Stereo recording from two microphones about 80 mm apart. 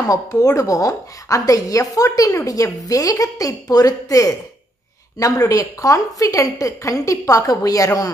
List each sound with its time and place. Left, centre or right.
0.1 s a woman's voice: left